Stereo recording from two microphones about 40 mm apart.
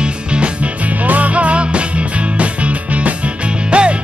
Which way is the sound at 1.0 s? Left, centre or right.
Right.